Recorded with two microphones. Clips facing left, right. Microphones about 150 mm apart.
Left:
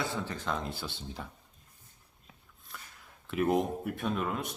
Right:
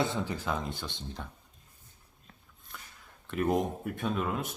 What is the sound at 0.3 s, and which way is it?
Speech, 5° right (ahead or behind).